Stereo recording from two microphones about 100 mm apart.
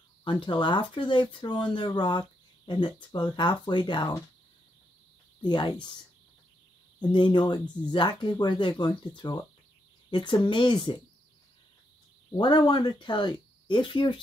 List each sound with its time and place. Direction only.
0.2 s speech: 50° left (ahead or behind)
5.4 s speech: 50° left (ahead or behind)
7.0 s speech: 50° left (ahead or behind)
12.4 s speech: 45° left (ahead or behind)